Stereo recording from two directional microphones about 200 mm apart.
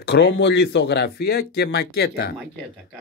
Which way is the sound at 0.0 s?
55° left (ahead or behind).